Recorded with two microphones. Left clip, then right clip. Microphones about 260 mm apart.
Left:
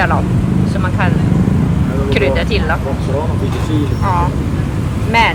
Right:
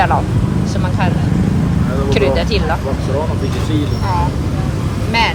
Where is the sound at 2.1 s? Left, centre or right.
Centre.